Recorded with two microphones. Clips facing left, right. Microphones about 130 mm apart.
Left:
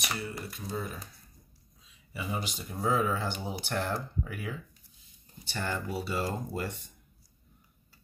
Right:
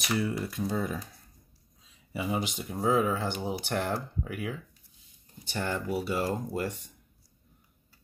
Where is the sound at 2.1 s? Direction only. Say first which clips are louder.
Right 5 dB; 20° right (ahead or behind).